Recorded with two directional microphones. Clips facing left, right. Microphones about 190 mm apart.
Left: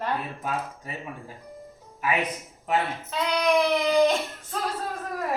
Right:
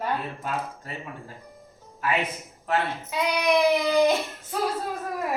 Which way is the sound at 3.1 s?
10° right (ahead or behind).